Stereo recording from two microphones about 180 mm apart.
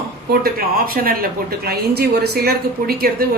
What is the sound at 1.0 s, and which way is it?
A woman's voice, 60° right (ahead or behind).